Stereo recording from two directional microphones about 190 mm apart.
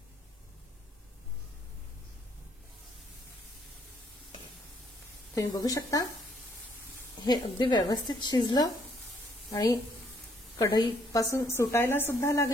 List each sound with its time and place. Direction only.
5.3 s a woman's voice: 20° left (ahead or behind)
7.2 s a woman's voice: 20° left (ahead or behind)